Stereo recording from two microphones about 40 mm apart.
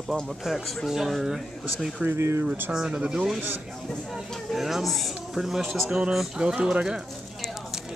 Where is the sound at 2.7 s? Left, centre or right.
Right.